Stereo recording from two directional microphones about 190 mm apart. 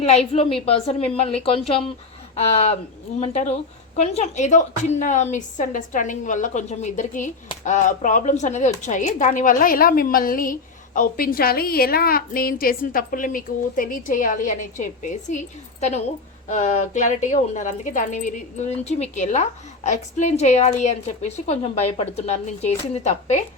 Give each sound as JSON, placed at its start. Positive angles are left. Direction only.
{"t": 0.0, "sound": "a woman's voice", "side_deg": 35}